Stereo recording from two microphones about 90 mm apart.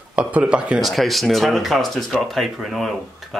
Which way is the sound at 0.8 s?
Centre (ahead or behind).